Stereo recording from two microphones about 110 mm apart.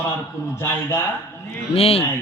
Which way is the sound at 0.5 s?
25° left (ahead or behind).